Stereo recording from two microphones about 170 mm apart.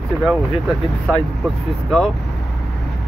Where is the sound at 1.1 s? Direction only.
Centre (ahead or behind).